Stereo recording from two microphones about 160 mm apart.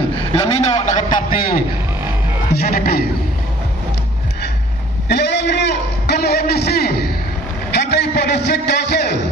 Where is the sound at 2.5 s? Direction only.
70° left (ahead or behind).